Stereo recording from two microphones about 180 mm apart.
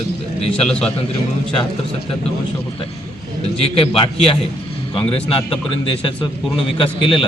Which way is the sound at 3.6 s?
35° left (ahead or behind).